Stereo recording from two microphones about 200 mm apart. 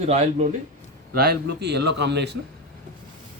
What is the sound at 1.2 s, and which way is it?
Speech, 55° right (ahead or behind).